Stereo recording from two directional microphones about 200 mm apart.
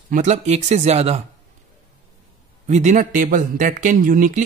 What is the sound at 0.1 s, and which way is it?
A man's voice, 35° right (ahead or behind).